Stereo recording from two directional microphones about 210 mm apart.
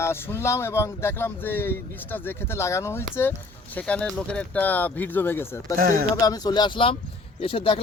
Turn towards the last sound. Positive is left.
turn(degrees=25)  # may be behind; listen again after turning